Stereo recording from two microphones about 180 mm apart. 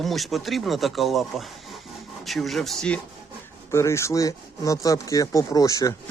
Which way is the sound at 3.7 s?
15° left (ahead or behind).